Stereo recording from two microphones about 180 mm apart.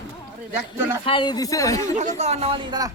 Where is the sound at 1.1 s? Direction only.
25° left (ahead or behind).